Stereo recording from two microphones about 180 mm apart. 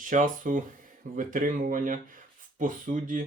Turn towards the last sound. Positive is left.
turn(degrees=-45)  # may be behind; listen again after turning